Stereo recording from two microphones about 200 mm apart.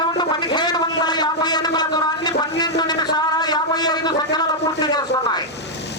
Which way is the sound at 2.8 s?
20° left (ahead or behind).